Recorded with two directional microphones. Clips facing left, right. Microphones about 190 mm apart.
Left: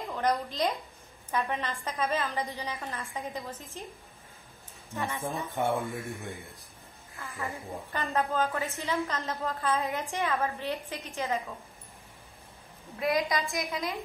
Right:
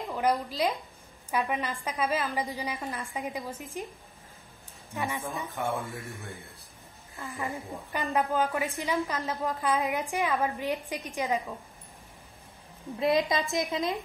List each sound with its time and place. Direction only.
0.1 s a woman's voice: 10° right (ahead or behind)
4.9 s a woman's voice: 15° right (ahead or behind)
5.6 s speech: 15° left (ahead or behind)
7.2 s a woman's voice: 15° right (ahead or behind)
13.0 s a woman's voice: 25° right (ahead or behind)